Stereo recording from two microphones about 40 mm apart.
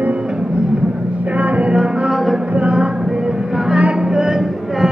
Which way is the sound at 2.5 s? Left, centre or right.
Right.